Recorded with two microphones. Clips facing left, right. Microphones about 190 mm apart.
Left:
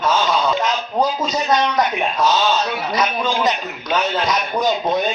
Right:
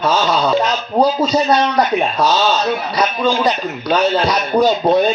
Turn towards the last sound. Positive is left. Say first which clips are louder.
# right 6 dB
turn(degrees=-35)  # may be behind; listen again after turning